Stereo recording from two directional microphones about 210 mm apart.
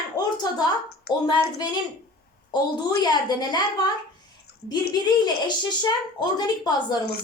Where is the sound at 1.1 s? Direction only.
50° left (ahead or behind).